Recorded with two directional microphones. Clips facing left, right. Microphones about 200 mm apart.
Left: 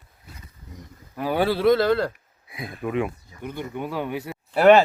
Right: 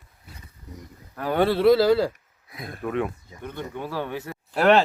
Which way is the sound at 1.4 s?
Centre (ahead or behind).